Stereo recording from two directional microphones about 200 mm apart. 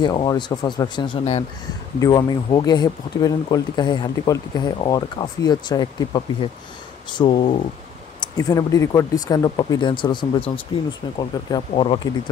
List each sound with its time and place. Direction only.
0.0 s speech: 20° left (ahead or behind)